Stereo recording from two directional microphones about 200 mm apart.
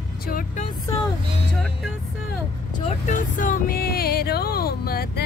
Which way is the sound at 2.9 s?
40° left (ahead or behind).